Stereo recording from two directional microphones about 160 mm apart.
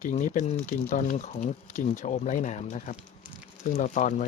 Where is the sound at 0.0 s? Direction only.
50° left (ahead or behind).